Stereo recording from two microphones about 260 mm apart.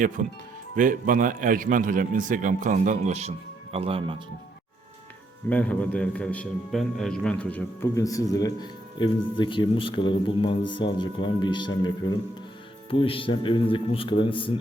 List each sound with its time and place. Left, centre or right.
0.2 s a man's voice: right
5.5 s a man's voice: centre